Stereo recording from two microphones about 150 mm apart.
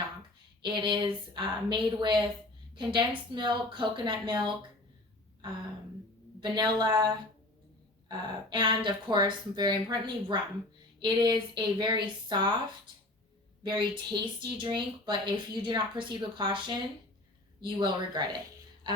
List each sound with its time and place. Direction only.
0.6 s speech: 30° right (ahead or behind)
6.4 s speech: 30° right (ahead or behind)